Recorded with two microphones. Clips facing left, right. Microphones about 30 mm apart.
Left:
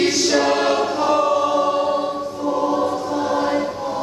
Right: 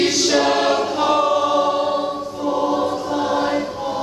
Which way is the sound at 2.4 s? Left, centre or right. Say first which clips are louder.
Even; right.